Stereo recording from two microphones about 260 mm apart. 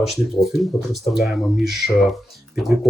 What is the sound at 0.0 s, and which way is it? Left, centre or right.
Speech, centre.